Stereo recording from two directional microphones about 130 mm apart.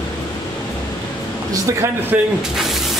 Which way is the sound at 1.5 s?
20° right (ahead or behind).